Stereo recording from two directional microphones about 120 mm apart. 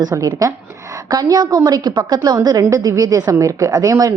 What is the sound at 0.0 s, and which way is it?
A woman's voice, 30° right (ahead or behind).